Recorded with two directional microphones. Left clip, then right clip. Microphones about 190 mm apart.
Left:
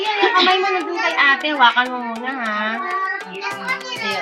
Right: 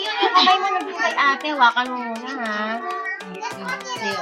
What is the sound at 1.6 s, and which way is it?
Speech, 20° right (ahead or behind).